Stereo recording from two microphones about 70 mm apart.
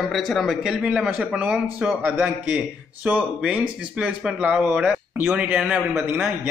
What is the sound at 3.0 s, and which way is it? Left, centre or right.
Speech, centre.